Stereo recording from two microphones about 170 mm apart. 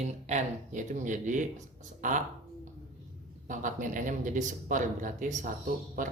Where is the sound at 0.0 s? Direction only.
45° right (ahead or behind).